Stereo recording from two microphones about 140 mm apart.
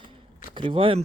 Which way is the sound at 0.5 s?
40° right (ahead or behind).